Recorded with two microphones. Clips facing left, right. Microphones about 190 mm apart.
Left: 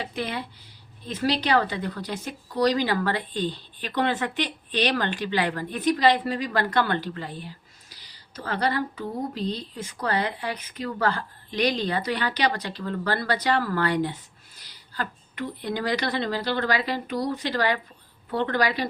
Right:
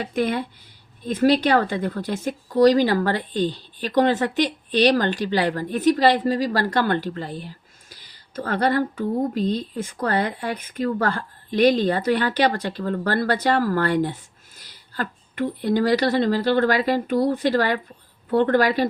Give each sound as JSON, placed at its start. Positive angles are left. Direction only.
{"t": 0.0, "sound": "a woman's voice", "side_deg": -50}